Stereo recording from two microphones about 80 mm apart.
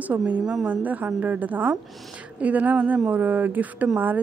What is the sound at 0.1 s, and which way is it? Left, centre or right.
A woman's voice, right.